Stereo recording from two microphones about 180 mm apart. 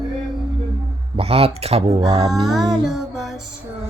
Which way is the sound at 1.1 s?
35° right (ahead or behind).